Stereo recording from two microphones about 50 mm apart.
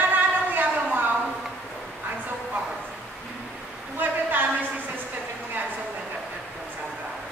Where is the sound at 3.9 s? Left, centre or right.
Right.